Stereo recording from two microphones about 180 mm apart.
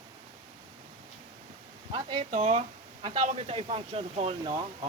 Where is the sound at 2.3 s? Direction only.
40° right (ahead or behind).